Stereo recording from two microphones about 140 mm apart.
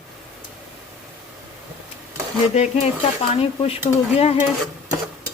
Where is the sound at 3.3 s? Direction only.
45° left (ahead or behind).